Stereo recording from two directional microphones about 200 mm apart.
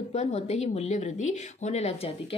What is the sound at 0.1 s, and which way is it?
A woman's voice, 35° left (ahead or behind).